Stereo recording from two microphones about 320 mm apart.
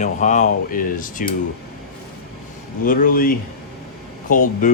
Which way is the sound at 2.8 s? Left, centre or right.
Left.